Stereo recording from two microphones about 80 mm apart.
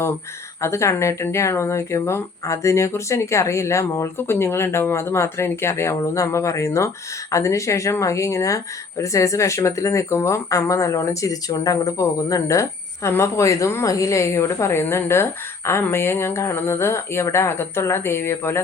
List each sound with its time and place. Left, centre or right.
0.6 s speech: left